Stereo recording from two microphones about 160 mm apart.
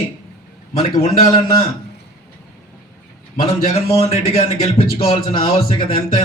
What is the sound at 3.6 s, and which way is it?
A man's voice, 40° left (ahead or behind).